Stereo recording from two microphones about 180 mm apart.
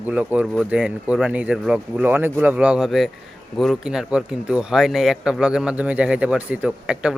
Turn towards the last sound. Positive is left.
turn(degrees=-5)  # may be behind; listen again after turning